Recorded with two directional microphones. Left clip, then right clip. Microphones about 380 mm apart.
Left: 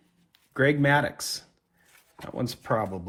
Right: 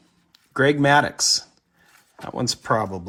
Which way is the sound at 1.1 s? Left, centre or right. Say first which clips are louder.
Right 14 dB; centre.